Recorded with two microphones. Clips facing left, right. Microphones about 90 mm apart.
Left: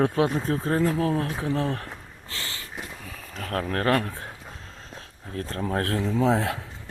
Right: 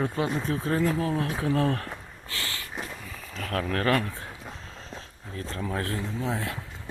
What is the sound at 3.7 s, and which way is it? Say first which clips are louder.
Speech: left 2 dB; 35° left (ahead or behind).